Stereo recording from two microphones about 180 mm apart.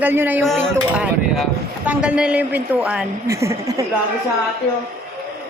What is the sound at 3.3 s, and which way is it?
Speech, 15° right (ahead or behind).